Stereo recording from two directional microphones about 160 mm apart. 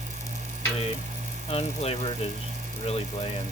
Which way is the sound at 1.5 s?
40° left (ahead or behind).